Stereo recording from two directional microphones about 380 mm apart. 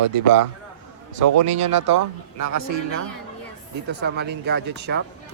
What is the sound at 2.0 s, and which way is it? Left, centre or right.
Speech, right.